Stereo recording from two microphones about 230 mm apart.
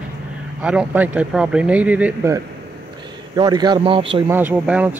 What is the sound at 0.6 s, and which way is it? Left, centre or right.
Speech, centre.